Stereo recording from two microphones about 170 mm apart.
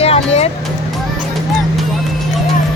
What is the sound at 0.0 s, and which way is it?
Vehicle, 35° left (ahead or behind).